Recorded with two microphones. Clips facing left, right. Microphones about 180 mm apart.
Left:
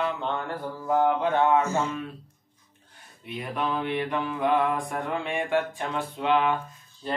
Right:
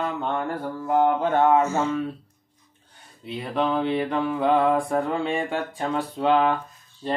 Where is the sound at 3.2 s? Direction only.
30° right (ahead or behind).